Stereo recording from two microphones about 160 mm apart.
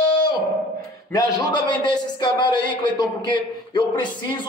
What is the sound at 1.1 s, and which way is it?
A man's voice, 25° left (ahead or behind).